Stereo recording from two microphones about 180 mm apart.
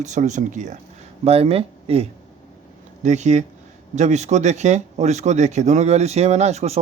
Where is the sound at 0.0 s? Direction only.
40° right (ahead or behind).